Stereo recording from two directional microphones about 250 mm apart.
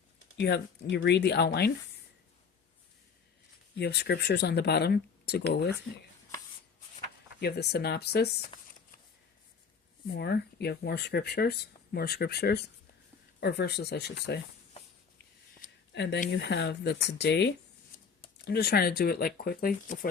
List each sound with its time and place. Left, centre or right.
0.3 s speech: left
3.8 s speech: left
7.3 s speech: left
8.4 s a sound: left
10.1 s speech: left
15.6 s speech: left